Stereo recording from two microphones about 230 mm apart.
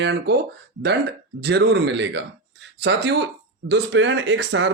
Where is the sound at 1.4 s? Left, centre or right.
Right.